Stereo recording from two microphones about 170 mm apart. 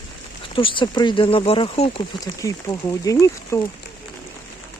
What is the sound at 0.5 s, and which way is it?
Speech, 30° left (ahead or behind).